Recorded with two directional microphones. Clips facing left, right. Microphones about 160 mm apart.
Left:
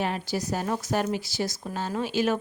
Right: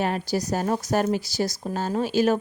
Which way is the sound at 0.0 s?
40° right (ahead or behind).